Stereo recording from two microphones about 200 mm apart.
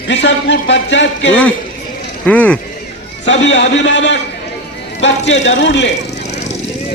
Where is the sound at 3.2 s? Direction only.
65° left (ahead or behind).